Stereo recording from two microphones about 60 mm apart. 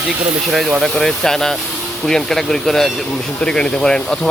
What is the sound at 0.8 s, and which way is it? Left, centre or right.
Speech, centre.